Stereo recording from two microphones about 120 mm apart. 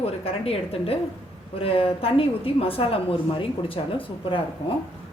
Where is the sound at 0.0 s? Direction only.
55° left (ahead or behind).